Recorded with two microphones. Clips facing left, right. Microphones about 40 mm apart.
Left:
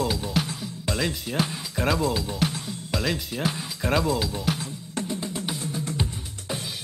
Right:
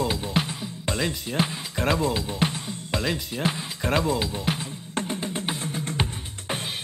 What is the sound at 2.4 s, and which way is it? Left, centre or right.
Music, right.